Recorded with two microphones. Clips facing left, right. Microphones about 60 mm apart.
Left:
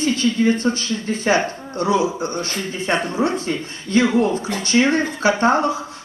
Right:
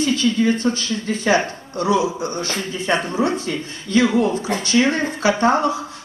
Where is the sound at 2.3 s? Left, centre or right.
Right.